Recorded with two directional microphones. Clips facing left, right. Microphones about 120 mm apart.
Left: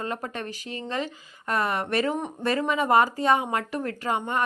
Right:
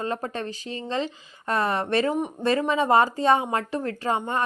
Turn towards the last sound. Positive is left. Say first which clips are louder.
# right 1 dB
turn(degrees=-30)  # may be behind; listen again after turning